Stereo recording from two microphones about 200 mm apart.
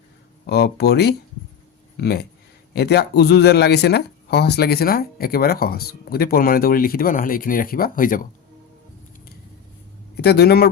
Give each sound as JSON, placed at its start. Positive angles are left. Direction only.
{"t": 0.4, "sound": "speech", "side_deg": 55}
{"t": 10.2, "sound": "speech", "side_deg": 55}